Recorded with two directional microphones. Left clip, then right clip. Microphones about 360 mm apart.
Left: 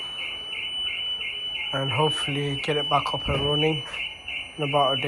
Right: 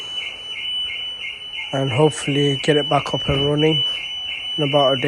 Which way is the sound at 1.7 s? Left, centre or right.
Right.